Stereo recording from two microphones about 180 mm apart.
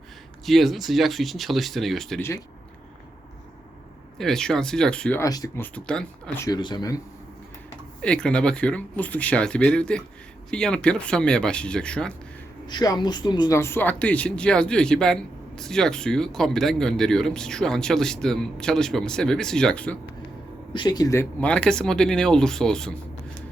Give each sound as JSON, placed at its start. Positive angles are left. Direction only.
{"t": 0.4, "sound": "speech", "side_deg": 0}
{"t": 4.2, "sound": "speech", "side_deg": 5}
{"t": 5.2, "sound": "speech", "side_deg": 20}
{"t": 5.6, "sound": "speech", "side_deg": 5}
{"t": 6.4, "sound": "speech", "side_deg": 25}
{"t": 8.0, "sound": "speech", "side_deg": 5}
{"t": 12.6, "sound": "speech", "side_deg": 25}
{"t": 20.7, "sound": "speech", "side_deg": 25}